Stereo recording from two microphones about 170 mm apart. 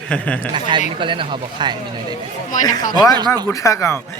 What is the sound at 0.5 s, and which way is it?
Speech, 30° right (ahead or behind).